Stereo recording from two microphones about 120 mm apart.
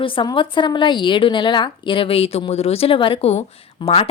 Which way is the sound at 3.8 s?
50° left (ahead or behind).